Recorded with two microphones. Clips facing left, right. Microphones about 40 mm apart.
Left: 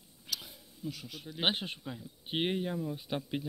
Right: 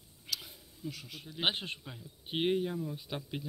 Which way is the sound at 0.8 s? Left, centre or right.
Centre.